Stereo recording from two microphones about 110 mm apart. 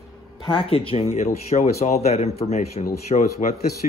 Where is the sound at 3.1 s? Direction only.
65° left (ahead or behind).